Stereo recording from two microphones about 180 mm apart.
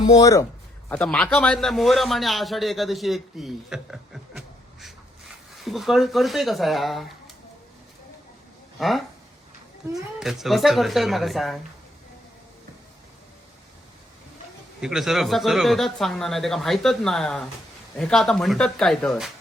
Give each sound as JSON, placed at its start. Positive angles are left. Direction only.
{"t": 0.2, "sound": "speech", "side_deg": 15}
{"t": 0.9, "sound": "a man's voice", "side_deg": 5}
{"t": 8.8, "sound": "speech", "side_deg": 0}
{"t": 14.8, "sound": "speech", "side_deg": 0}